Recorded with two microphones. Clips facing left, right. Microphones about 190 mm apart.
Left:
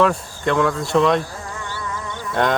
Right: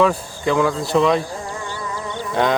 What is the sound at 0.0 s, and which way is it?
Speech, centre (ahead or behind).